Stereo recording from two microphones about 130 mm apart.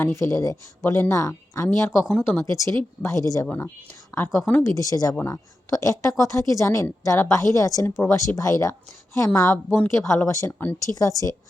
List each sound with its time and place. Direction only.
0.0 s a woman's voice: 20° left (ahead or behind)
3.4 s a woman's voice: 15° left (ahead or behind)
4.7 s a woman's voice: 25° left (ahead or behind)